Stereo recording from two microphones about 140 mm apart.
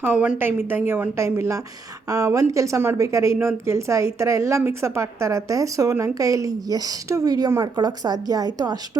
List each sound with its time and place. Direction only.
0.0 s a woman's voice: 10° right (ahead or behind); by 8.8 s 30° right (ahead or behind)